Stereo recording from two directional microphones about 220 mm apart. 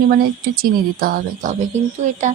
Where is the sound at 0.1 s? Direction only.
45° right (ahead or behind).